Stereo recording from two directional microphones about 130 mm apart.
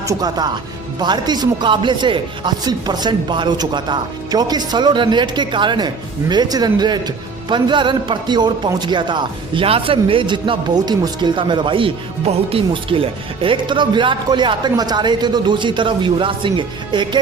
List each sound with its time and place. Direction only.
0.0 s speech: 30° right (ahead or behind)